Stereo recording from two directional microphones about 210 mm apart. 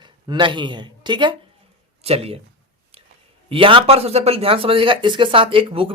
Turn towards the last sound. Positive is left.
turn(degrees=-25)  # may be behind; listen again after turning